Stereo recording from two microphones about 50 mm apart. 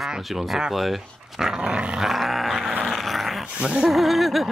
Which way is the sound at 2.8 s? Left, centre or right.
Centre.